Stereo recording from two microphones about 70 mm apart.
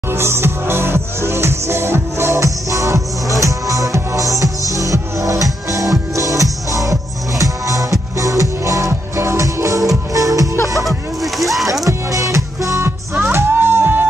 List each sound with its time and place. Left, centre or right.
0.2 s music: right
10.8 s a sound: centre
11.8 s music: right
13.3 s music: right